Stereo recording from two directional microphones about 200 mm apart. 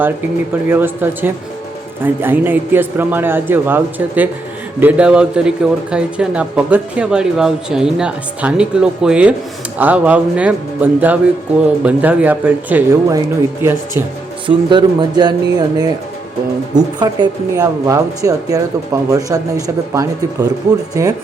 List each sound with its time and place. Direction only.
0.7 s a man's voice: 10° right (ahead or behind)